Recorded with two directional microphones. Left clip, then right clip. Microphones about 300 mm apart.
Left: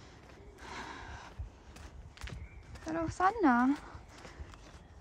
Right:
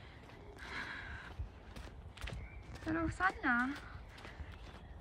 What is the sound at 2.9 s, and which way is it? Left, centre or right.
Speech, centre.